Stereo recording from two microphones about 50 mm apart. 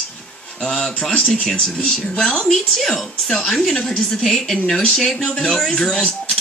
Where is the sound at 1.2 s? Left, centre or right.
Centre.